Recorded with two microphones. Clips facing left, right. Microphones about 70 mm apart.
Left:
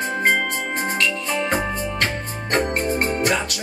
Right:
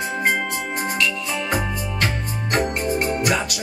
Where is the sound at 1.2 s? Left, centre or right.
Left.